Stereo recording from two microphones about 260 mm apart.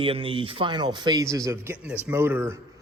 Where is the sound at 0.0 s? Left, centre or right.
Right.